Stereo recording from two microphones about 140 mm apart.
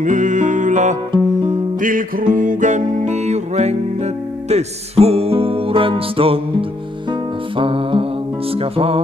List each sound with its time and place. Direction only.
0.0 s music: 70° right (ahead or behind)
1.8 s music: 75° right (ahead or behind); by 9.0 s 45° right (ahead or behind)